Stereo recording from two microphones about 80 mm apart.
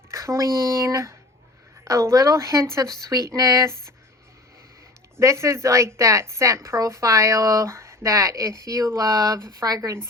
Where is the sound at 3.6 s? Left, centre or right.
Right.